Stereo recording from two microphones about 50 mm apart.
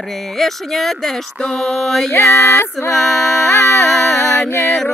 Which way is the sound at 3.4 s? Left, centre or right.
Left.